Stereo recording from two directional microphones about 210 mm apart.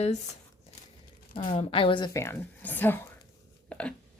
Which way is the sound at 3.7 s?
5° left (ahead or behind).